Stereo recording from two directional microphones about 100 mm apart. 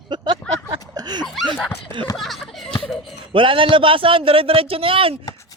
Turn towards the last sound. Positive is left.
turn(degrees=-65)  # may be behind; listen again after turning